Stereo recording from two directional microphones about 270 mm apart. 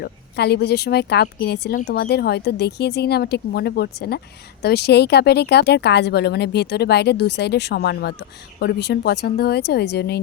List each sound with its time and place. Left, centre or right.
0.0 s speech: left